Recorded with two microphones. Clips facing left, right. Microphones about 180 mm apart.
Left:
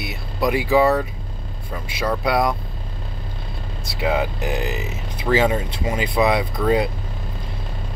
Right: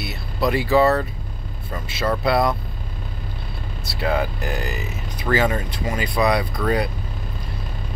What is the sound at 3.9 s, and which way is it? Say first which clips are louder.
Speech: left 1 dB; 15° left (ahead or behind).